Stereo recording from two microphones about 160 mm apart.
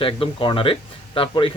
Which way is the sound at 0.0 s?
35° left (ahead or behind).